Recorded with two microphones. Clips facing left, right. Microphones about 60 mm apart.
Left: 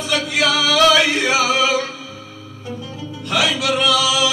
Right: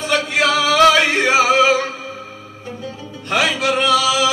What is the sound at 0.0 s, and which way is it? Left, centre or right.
Music, right.